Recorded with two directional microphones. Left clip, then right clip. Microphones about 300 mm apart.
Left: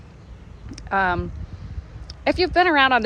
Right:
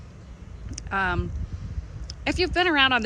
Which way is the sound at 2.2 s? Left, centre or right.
Centre.